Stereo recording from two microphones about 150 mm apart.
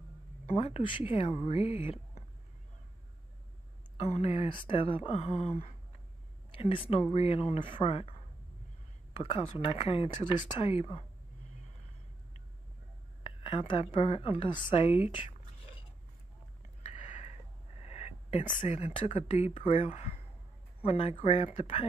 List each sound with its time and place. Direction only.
0.5 s a woman's voice: 40° left (ahead or behind)
3.9 s a woman's voice: 40° left (ahead or behind)
13.2 s a woman's voice: 35° left (ahead or behind)
16.6 s a sound: 55° left (ahead or behind)
18.4 s a woman's voice: 45° left (ahead or behind)